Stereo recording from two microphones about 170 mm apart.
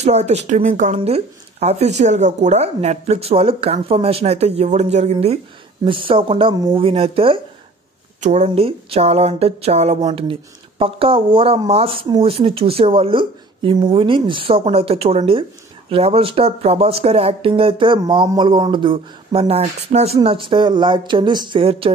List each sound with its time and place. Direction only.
0.0 s speech: 40° right (ahead or behind); by 6.8 s 20° right (ahead or behind)
6.8 s speech: 35° right (ahead or behind)